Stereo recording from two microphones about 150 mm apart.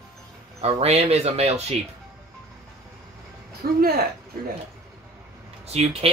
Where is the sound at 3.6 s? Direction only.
75° right (ahead or behind).